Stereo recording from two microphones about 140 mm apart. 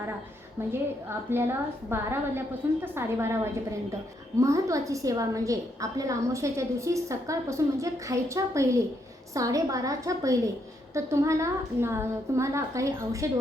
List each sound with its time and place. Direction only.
1.3 s a woman's voice: 15° right (ahead or behind)